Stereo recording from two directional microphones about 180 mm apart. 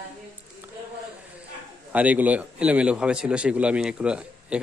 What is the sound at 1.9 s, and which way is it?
A man's voice, 10° right (ahead or behind).